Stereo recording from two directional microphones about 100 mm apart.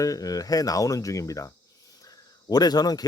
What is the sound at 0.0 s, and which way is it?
Speech, 35° left (ahead or behind).